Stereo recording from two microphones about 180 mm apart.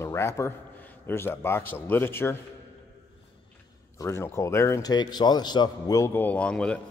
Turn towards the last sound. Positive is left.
turn(degrees=5)  # may be behind; listen again after turning